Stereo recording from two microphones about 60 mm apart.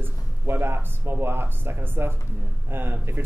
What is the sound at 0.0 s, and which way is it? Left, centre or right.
Speech, right.